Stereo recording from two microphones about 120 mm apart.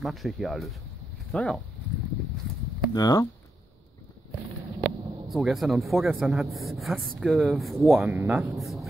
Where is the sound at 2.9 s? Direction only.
30° left (ahead or behind).